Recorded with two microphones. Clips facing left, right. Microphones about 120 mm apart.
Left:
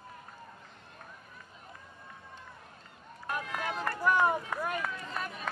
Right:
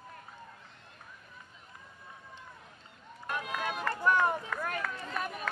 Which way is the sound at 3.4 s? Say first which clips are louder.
Right 1 dB; 15° right (ahead or behind).